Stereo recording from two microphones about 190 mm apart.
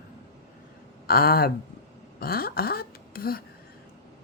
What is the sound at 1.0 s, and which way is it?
Speech, 55° left (ahead or behind).